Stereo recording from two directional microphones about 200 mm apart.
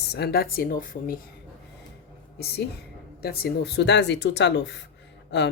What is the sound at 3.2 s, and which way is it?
Speech, 50° left (ahead or behind).